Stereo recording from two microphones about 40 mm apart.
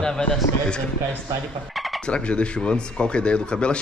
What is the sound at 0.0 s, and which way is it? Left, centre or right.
Speech, left.